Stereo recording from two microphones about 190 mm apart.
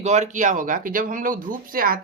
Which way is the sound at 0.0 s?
35° right (ahead or behind).